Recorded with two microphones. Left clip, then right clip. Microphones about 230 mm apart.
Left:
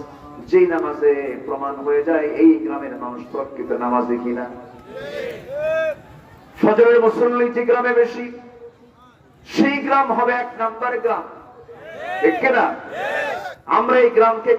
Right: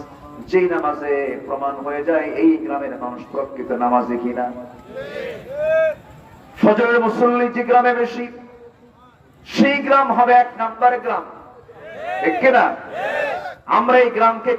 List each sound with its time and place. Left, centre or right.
0.4 s a man's voice: right
4.9 s speech: left
5.6 s a sound: left
6.6 s a man's voice: right
9.5 s a man's voice: right
12.4 s a man's voice: right
13.1 s battle cry: left
13.7 s a man's voice: right